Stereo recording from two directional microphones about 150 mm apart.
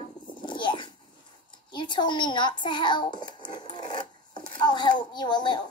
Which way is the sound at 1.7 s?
30° left (ahead or behind).